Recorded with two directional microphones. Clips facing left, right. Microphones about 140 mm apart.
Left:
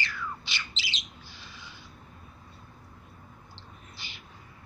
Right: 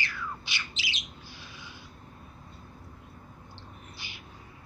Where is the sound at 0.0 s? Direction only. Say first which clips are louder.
Left 1 dB; 10° right (ahead or behind).